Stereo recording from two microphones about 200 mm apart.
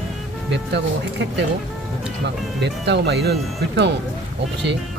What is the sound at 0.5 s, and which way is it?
Speech, 60° right (ahead or behind).